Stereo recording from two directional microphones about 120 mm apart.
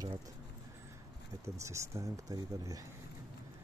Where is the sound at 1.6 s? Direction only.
25° right (ahead or behind).